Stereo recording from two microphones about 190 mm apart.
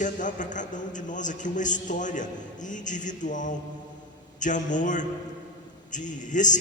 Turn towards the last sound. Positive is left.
turn(degrees=40)  # may be behind; listen again after turning